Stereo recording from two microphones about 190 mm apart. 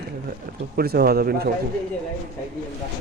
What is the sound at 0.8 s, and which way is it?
Speech, 55° right (ahead or behind).